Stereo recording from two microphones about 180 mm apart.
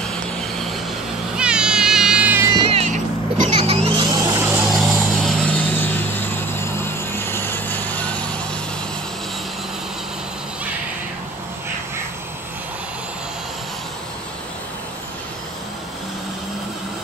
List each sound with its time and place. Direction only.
1.3 s cat: 5° right (ahead or behind)
2.7 s music: 35° right (ahead or behind)
3.4 s vehicle: 35° right (ahead or behind)
4.1 s a sound: 15° right (ahead or behind)
4.6 s vehicle: centre (ahead or behind)